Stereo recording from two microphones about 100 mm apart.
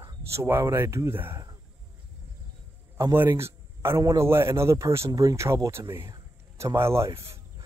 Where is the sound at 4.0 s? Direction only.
40° right (ahead or behind).